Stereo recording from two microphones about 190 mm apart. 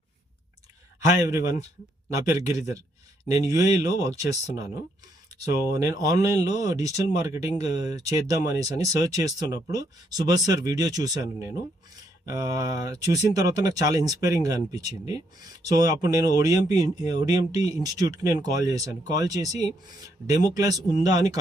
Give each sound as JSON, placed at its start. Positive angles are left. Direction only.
{"t": 2.1, "sound": "speech", "side_deg": -15}
{"t": 5.6, "sound": "speech", "side_deg": -20}